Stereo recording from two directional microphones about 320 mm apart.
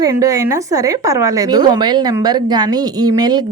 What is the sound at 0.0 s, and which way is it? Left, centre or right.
A woman's voice, centre.